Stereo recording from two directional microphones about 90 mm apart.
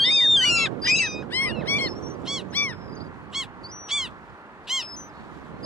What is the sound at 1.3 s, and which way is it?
Honk, 20° left (ahead or behind).